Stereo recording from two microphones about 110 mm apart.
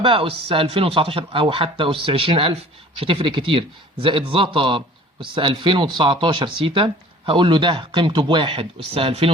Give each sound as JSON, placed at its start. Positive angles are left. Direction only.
{"t": 0.0, "sound": "speech", "side_deg": -55}